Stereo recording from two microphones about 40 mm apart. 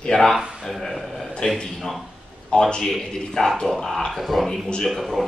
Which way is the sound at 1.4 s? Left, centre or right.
Centre.